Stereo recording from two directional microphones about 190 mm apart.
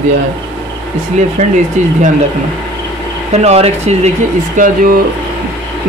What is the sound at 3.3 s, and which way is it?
Speech, 35° right (ahead or behind).